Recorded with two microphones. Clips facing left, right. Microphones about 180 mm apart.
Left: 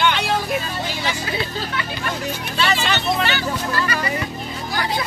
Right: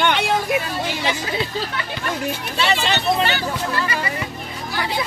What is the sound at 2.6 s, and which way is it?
Speech, 25° right (ahead or behind).